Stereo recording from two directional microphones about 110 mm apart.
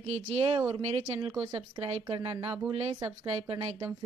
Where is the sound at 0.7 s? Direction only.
60° right (ahead or behind).